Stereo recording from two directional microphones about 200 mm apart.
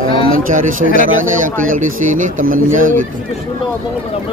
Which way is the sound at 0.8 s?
45° left (ahead or behind).